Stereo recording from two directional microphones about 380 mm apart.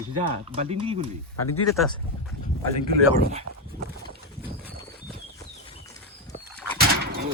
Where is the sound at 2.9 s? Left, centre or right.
Left.